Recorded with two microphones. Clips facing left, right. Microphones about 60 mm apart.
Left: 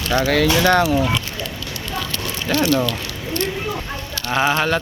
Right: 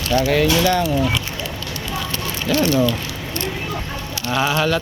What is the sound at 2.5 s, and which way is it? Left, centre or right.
Speech, left.